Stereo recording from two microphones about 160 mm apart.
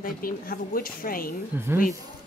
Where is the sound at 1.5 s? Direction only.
15° right (ahead or behind).